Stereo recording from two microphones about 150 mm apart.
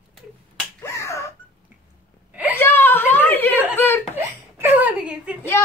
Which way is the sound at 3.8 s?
15° left (ahead or behind).